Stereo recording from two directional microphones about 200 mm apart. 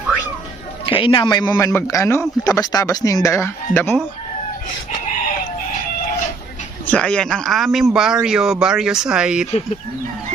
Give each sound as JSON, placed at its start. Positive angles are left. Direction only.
{"t": 0.9, "sound": "a man's voice", "side_deg": 25}
{"t": 6.8, "sound": "speech", "side_deg": 5}